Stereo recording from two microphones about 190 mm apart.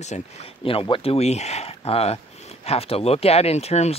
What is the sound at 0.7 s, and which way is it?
Speech, 30° left (ahead or behind).